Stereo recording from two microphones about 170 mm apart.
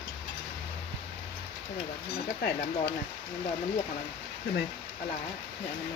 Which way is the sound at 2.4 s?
65° left (ahead or behind).